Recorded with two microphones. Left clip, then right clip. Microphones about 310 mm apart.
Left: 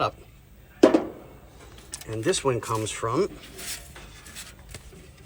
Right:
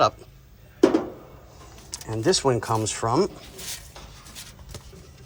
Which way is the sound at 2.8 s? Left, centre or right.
Right.